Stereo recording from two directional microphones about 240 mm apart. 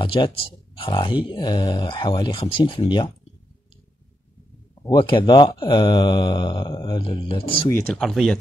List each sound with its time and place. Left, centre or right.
0.0 s speech: left
4.8 s speech: centre
7.7 s speech: centre